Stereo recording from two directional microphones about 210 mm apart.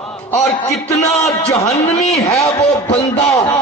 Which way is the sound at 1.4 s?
30° left (ahead or behind).